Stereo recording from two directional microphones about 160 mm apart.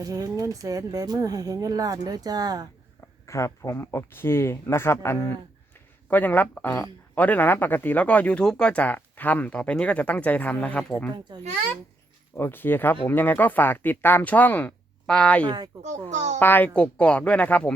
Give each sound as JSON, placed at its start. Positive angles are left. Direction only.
{"t": 0.0, "sound": "speech", "side_deg": -20}
{"t": 3.2, "sound": "speech", "side_deg": 20}
{"t": 11.3, "sound": "speech", "side_deg": -30}
{"t": 12.4, "sound": "speech", "side_deg": 15}
{"t": 15.4, "sound": "speech", "side_deg": -25}
{"t": 16.0, "sound": "a child's voice", "side_deg": -45}
{"t": 16.4, "sound": "speech", "side_deg": 10}